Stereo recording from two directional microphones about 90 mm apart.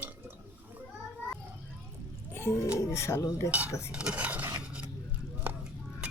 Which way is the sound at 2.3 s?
30° left (ahead or behind).